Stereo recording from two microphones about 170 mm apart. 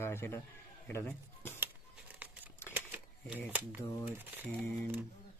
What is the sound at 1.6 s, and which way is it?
Crumpling, 10° right (ahead or behind).